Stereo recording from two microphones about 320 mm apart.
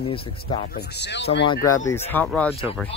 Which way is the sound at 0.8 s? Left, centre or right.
Left.